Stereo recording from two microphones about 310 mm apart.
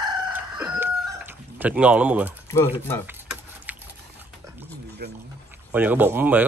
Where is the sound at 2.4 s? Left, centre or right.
Centre.